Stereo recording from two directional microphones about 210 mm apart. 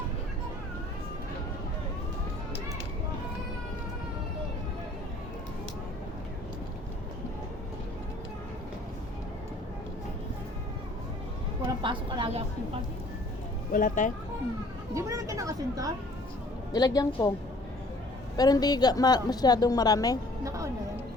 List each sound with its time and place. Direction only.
11.8 s a woman's voice: 25° right (ahead or behind)
13.7 s speech: 40° left (ahead or behind)
14.9 s speech: 15° right (ahead or behind)
16.7 s a woman's voice: 15° left (ahead or behind)
18.3 s a woman's voice: 20° left (ahead or behind)
20.4 s music: 15° right (ahead or behind)